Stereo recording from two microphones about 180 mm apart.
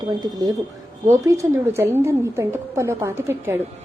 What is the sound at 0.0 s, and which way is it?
A woman's voice, 20° right (ahead or behind).